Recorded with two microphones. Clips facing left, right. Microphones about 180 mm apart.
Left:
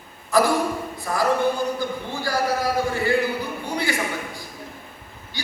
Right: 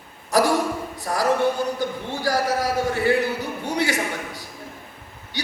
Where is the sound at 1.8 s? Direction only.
75° right (ahead or behind).